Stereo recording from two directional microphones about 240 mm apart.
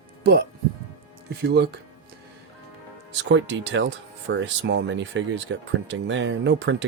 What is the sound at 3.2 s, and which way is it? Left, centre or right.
Speech, right.